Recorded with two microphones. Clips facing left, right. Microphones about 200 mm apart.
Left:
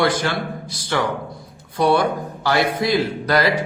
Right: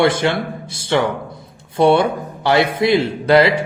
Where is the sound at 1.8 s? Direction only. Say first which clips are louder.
Right 4 dB; 25° right (ahead or behind).